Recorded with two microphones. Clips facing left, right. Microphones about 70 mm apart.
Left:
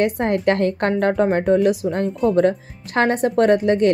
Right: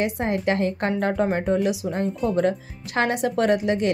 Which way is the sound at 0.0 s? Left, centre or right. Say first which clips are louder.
Left 5 dB; left.